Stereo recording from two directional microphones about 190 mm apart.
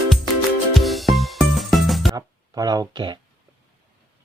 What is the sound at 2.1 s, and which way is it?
Speech, 20° right (ahead or behind).